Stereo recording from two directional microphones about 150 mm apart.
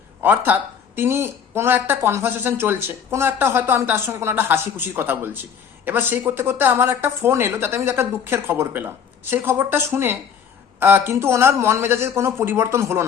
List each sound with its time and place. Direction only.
0.2 s a woman's voice: 10° right (ahead or behind)